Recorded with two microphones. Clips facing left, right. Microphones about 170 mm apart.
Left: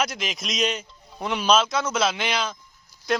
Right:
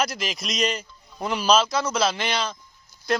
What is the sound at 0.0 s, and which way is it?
Speech, centre (ahead or behind).